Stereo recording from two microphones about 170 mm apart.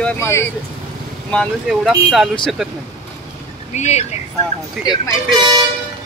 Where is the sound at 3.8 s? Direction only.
40° left (ahead or behind).